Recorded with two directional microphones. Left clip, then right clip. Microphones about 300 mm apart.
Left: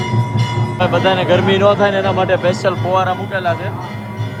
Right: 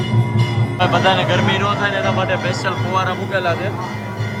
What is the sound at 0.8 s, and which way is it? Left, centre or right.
Speech, centre.